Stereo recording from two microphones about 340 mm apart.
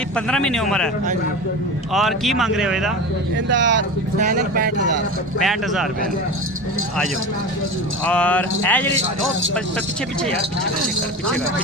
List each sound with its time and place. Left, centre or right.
0.3 s speech: centre
1.9 s speech: centre
3.5 s speech: right
5.4 s speech: centre
8.0 s speech: centre